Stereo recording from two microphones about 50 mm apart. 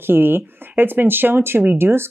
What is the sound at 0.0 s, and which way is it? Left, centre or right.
Speech, right.